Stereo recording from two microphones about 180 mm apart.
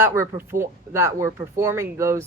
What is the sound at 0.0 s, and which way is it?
Speech, 15° right (ahead or behind).